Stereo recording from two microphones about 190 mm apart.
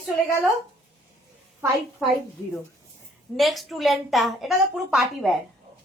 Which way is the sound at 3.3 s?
Centre (ahead or behind).